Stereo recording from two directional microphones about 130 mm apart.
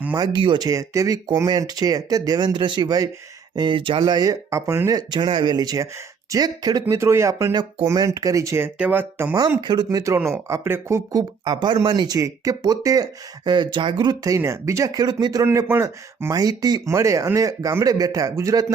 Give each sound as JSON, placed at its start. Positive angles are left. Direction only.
{"t": 0.2, "sound": "speech", "side_deg": -35}
{"t": 6.8, "sound": "speech", "side_deg": -20}
{"t": 9.6, "sound": "speech", "side_deg": -35}
{"t": 10.2, "sound": "speech", "side_deg": -20}
{"t": 15.6, "sound": "speech", "side_deg": -15}